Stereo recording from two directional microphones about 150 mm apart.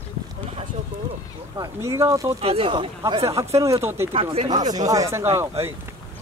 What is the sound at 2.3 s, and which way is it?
Speech, 40° right (ahead or behind).